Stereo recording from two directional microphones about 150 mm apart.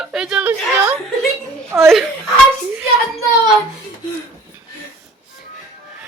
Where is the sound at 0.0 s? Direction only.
5° right (ahead or behind).